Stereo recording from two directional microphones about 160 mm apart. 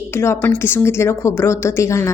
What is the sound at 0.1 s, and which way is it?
A woman's voice, 15° left (ahead or behind).